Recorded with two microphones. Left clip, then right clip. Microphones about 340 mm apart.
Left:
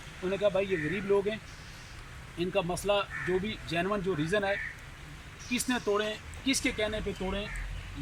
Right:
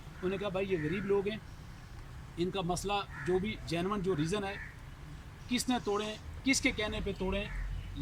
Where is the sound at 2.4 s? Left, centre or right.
Centre.